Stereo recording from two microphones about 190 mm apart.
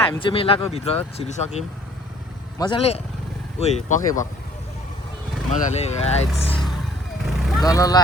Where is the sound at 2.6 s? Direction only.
25° left (ahead or behind).